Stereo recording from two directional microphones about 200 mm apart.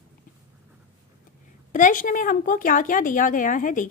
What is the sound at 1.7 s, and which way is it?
A woman's voice, 40° left (ahead or behind).